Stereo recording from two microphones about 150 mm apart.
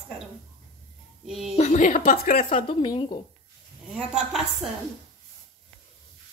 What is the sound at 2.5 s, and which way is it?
Speech, 40° left (ahead or behind).